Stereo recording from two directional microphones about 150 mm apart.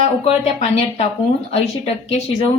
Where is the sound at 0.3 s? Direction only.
45° left (ahead or behind).